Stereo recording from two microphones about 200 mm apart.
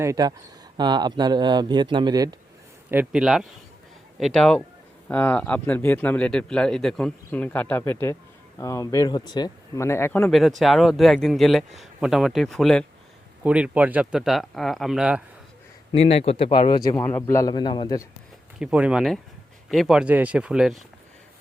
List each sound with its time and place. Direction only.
0.0 s speech: 15° right (ahead or behind)
2.9 s speech: 5° right (ahead or behind)
15.9 s a man's voice: 30° left (ahead or behind)
18.6 s speech: 5° right (ahead or behind)